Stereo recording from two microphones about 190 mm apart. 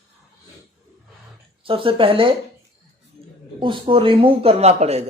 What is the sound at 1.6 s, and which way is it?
Speech, 30° right (ahead or behind).